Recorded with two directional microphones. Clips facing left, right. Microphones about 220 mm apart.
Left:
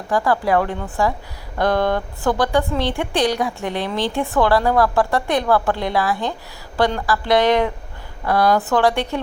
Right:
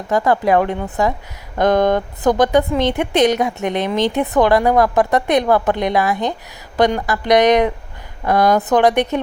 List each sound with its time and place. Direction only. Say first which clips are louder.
0.1 s a woman's voice: right 3 dB; 20° right (ahead or behind)